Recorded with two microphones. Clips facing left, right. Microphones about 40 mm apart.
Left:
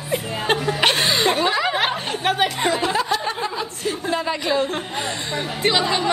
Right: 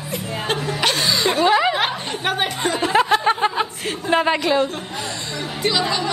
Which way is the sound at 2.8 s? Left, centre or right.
Right.